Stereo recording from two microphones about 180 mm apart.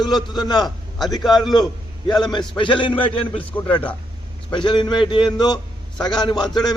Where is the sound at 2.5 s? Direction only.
25° left (ahead or behind).